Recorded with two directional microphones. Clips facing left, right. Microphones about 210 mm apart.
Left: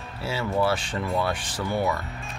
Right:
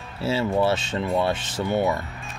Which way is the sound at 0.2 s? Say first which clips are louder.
Right 4 dB; 25° right (ahead or behind).